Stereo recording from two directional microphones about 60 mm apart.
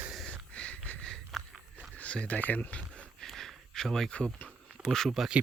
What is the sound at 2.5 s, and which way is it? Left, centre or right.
Speech, left.